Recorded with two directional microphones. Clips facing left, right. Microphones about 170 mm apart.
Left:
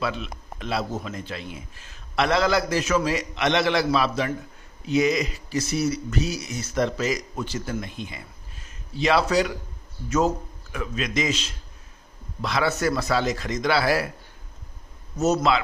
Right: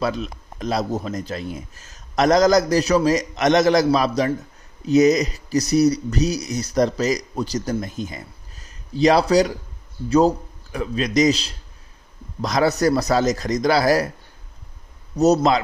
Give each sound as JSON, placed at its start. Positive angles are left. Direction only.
{"t": 0.0, "sound": "speech", "side_deg": -40}
{"t": 15.1, "sound": "speech", "side_deg": -35}